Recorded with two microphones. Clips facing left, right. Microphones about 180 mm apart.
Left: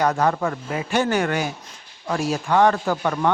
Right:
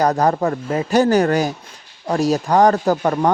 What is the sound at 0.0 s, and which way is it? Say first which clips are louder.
A man's voice: right 4 dB; 35° right (ahead or behind).